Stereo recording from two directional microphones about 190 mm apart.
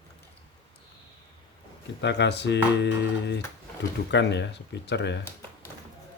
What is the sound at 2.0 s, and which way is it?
Speech, 65° left (ahead or behind).